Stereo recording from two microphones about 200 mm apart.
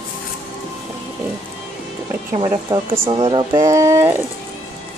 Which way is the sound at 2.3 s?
20° right (ahead or behind).